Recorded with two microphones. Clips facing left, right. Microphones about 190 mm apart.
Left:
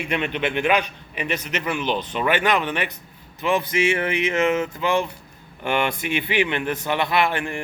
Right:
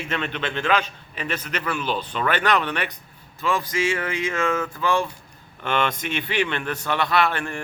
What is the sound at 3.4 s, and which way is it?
A man's voice, 20° left (ahead or behind).